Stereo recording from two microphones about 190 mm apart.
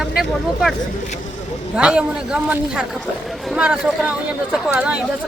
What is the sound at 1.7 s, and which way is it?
Speech, 5° right (ahead or behind).